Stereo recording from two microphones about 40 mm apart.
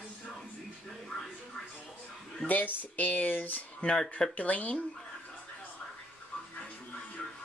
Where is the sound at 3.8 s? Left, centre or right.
Centre.